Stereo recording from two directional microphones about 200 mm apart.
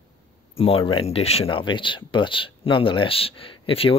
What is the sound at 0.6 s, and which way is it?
Speech, 30° left (ahead or behind).